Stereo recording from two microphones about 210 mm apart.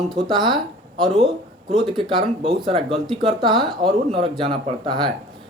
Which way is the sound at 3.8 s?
25° right (ahead or behind).